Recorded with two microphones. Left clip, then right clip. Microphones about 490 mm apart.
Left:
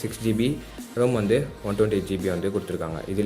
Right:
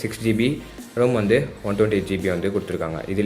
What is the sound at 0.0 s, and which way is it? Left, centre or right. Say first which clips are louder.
Speech: right 4 dB; left.